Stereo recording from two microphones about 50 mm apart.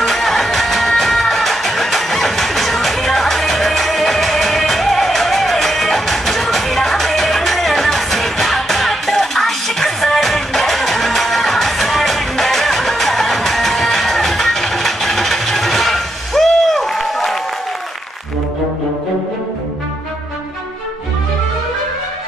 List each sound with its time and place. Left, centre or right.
0.0 s music: centre